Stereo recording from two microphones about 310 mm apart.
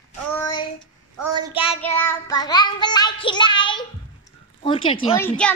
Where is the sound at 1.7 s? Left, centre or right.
Centre.